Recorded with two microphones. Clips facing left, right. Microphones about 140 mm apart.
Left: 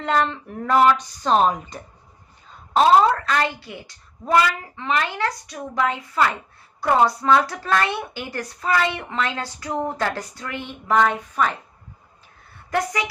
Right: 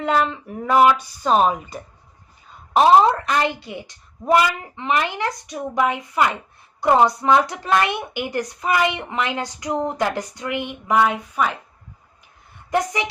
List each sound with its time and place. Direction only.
0.0 s speech: 5° right (ahead or behind)
2.7 s speech: 20° right (ahead or behind)
12.7 s a woman's voice: 25° right (ahead or behind)